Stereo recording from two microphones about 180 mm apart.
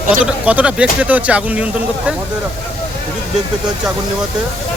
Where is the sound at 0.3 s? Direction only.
5° right (ahead or behind).